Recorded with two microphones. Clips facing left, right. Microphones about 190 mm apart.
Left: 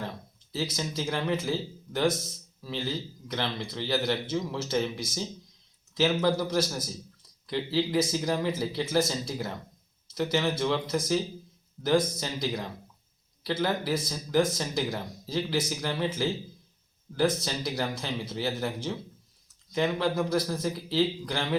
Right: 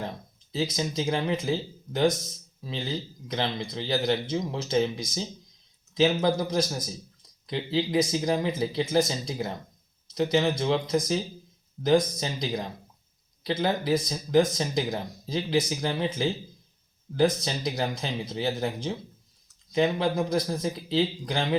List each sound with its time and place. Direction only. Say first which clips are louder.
0.5 s speech: right 4 dB; 20° right (ahead or behind)
6.2 s speech: right 1 dB; 20° right (ahead or behind)